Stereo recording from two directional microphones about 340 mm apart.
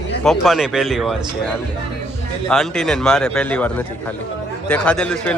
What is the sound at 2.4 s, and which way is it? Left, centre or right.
A man's voice, centre.